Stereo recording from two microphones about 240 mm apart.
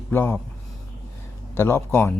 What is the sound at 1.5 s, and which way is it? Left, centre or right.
Speech, centre.